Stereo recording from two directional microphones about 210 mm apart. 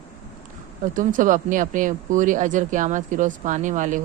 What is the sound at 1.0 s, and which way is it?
A woman's voice, 40° right (ahead or behind).